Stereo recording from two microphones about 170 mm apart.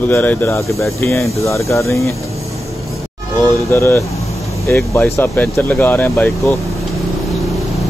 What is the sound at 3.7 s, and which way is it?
Speech, 15° left (ahead or behind).